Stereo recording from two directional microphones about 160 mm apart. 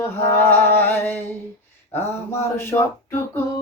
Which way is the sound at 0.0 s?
15° left (ahead or behind).